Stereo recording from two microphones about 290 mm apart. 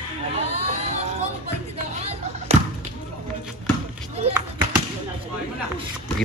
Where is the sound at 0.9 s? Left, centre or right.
Right.